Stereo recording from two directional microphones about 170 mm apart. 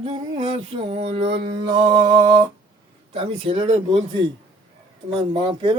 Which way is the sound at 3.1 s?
35° right (ahead or behind).